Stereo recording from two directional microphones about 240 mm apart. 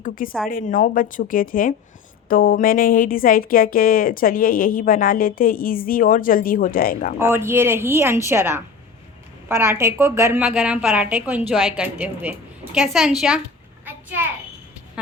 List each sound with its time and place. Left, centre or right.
0.0 s a woman's voice: left
7.2 s a woman's voice: centre
13.8 s a sound: centre